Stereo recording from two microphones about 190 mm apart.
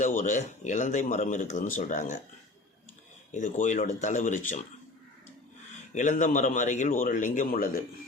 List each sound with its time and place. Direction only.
0.0 s speech: 40° left (ahead or behind)
3.3 s speech: 40° left (ahead or behind)
5.9 s speech: 40° left (ahead or behind)